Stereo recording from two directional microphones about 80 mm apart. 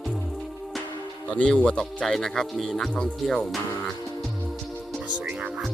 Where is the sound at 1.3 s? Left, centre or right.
Centre.